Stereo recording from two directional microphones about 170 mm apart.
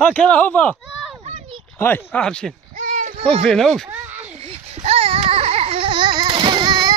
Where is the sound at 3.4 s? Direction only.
5° left (ahead or behind).